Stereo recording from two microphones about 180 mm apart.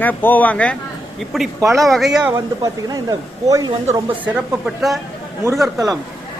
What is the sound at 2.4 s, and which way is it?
Speech, 20° right (ahead or behind).